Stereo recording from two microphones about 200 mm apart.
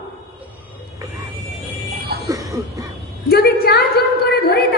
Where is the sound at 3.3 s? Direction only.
50° left (ahead or behind).